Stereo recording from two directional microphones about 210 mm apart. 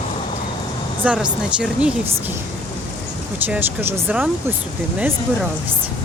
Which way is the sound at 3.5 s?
10° right (ahead or behind).